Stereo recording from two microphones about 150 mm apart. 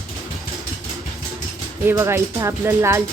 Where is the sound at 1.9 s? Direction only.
20° right (ahead or behind).